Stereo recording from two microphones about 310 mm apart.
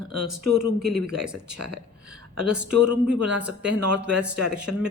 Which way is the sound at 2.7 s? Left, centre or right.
Right.